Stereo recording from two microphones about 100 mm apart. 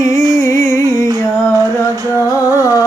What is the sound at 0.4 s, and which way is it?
Music, 30° left (ahead or behind).